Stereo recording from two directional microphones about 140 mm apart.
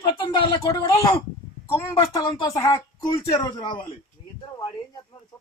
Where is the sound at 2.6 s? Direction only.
25° left (ahead or behind).